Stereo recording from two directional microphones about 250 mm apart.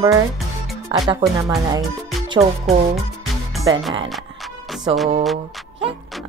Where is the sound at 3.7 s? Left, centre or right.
Centre.